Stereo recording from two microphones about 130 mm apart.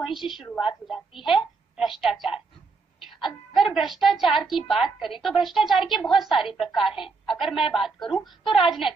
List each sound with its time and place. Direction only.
0.0 s a woman's voice: 5° right (ahead or behind)
3.7 s a woman's voice: centre (ahead or behind)